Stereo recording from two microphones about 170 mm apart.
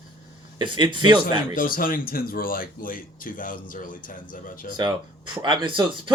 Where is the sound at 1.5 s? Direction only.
55° left (ahead or behind).